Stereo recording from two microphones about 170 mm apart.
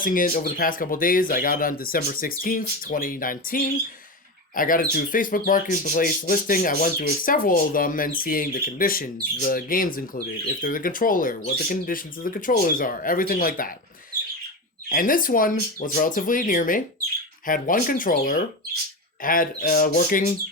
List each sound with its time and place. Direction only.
0.0 s speech: 55° left (ahead or behind)